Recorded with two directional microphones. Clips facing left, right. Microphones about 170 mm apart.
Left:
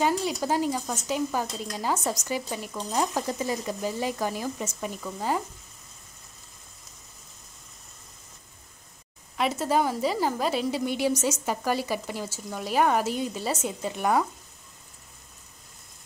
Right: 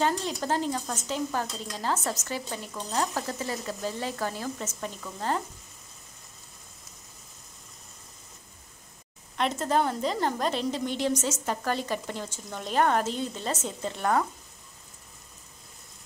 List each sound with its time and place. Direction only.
0.0 s speech: 10° left (ahead or behind)
9.4 s speech: 5° left (ahead or behind)